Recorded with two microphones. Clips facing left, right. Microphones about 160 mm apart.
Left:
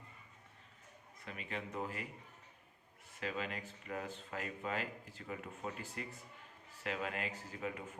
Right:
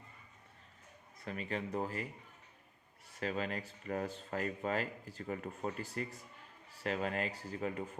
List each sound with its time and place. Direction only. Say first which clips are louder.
1.2 s speech: right 5 dB; 40° right (ahead or behind)
3.2 s speech: right 4 dB; 40° right (ahead or behind)